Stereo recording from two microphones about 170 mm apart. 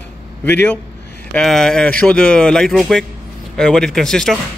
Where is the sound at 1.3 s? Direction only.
5° left (ahead or behind).